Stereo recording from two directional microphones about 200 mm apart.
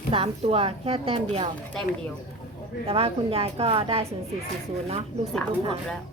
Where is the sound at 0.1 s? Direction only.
30° right (ahead or behind).